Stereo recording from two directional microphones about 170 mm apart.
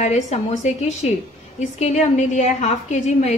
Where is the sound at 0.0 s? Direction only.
40° left (ahead or behind).